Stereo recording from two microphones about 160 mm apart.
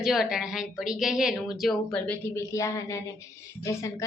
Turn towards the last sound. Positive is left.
turn(degrees=20)  # may be behind; listen again after turning